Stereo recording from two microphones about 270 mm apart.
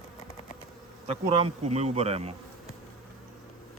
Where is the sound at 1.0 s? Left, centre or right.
Right.